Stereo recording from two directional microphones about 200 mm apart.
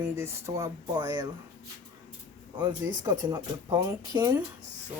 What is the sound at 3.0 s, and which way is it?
Speech, 20° right (ahead or behind).